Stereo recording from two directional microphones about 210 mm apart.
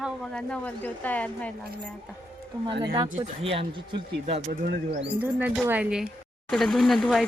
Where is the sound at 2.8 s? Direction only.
20° right (ahead or behind).